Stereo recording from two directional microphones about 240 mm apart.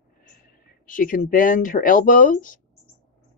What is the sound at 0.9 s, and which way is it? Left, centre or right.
Speech, left.